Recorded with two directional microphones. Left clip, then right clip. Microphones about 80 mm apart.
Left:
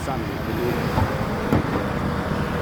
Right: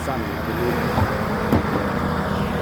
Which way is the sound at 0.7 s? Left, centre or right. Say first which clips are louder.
Right 2 dB; right.